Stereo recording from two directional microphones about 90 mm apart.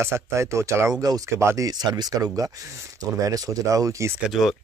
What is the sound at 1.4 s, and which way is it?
Speech, 30° right (ahead or behind).